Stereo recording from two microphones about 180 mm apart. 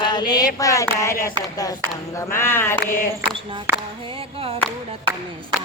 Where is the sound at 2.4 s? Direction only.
15° left (ahead or behind).